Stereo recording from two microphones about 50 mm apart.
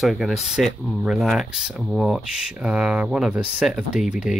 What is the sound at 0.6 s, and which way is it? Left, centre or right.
Speech, centre.